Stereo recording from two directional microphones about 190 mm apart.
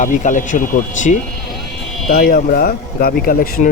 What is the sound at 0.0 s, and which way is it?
Speech, 40° left (ahead or behind).